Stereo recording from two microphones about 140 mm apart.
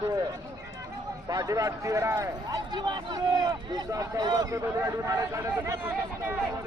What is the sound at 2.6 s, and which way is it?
Speech, 30° right (ahead or behind).